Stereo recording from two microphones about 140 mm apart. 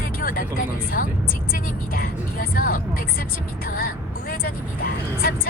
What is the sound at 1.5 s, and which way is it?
Speech, 90° left.